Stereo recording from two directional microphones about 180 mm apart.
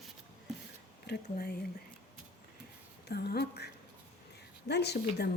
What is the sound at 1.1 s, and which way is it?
Speech, 60° left (ahead or behind).